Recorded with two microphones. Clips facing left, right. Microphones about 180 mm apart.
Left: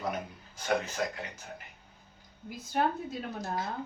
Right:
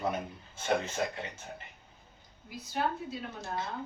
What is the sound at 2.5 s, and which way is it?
Speech, 50° left (ahead or behind).